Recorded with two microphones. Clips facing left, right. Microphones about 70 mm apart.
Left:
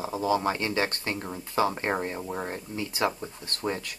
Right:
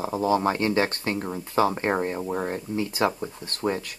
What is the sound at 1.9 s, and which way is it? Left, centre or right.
Speech, centre.